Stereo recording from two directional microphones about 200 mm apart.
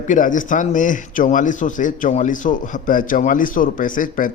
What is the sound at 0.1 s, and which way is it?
A man's voice, 40° left (ahead or behind).